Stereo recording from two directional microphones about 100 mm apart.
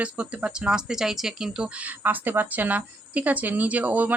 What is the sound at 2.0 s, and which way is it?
Speech, 20° right (ahead or behind).